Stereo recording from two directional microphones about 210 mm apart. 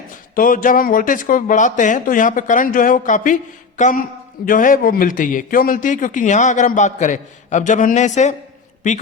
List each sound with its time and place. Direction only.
0.3 s a man's voice: 40° left (ahead or behind)